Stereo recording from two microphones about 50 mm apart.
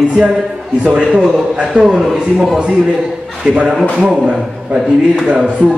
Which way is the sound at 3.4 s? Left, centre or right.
Right.